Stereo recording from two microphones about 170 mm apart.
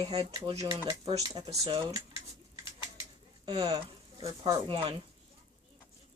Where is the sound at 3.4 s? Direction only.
25° right (ahead or behind).